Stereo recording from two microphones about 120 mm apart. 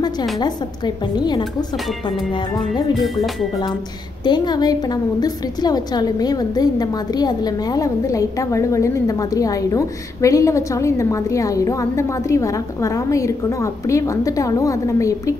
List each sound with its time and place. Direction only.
0.4 s a woman's voice: 35° left (ahead or behind)
4.2 s a woman's voice: 35° left (ahead or behind)